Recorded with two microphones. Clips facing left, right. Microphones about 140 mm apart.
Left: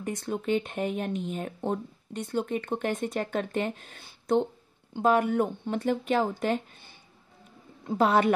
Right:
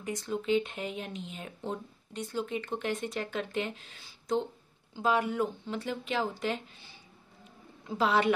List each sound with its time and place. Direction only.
0.0 s speech: 55° left (ahead or behind)